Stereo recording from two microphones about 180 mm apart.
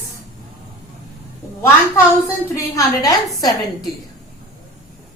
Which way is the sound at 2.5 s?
20° left (ahead or behind).